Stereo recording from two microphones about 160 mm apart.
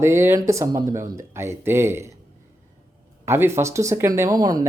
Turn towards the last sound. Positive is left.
turn(degrees=-25)  # may be behind; listen again after turning